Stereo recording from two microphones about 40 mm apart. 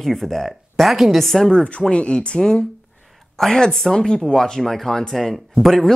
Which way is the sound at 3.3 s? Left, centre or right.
Centre.